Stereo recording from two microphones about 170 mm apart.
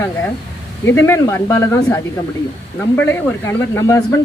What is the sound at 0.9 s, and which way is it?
Speech, 15° left (ahead or behind).